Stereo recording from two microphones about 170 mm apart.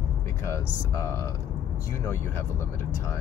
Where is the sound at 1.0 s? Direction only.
15° left (ahead or behind).